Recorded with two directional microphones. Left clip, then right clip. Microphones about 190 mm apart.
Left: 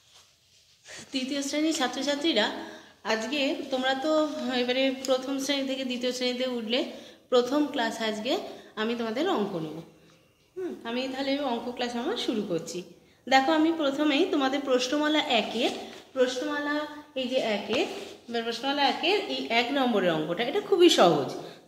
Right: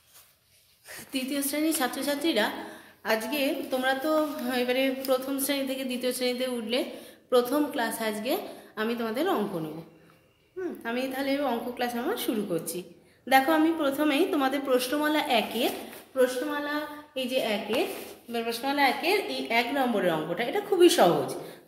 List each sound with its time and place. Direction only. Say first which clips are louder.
0.9 s a woman's voice: even; 5° right (ahead or behind)
10.8 s a woman's voice: right 1 dB; 15° right (ahead or behind); by 19.6 s 15° left (ahead or behind)
19.7 s a woman's voice: left 1 dB; 30° left (ahead or behind)